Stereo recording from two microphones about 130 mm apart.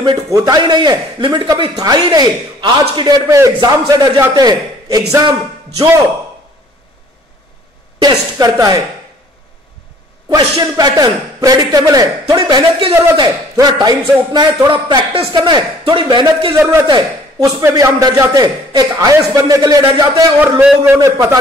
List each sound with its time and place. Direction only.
0.0 s a man's voice: 30° right (ahead or behind)
8.0 s a man's voice: 30° right (ahead or behind)
10.3 s a man's voice: 30° right (ahead or behind)
20.3 s a man's voice: 15° right (ahead or behind)
21.0 s a man's voice: 25° right (ahead or behind)